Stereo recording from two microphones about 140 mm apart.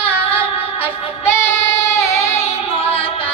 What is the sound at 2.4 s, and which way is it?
Music, 45° left (ahead or behind).